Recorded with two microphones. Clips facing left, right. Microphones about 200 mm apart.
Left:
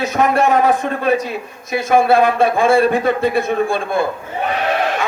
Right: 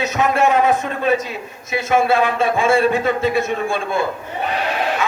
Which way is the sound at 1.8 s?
45° left (ahead or behind).